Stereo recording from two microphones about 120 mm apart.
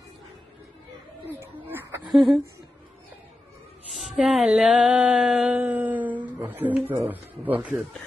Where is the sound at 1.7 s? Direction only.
15° right (ahead or behind).